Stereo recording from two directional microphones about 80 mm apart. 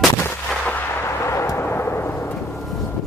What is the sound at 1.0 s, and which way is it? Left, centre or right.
Artillery fire, left.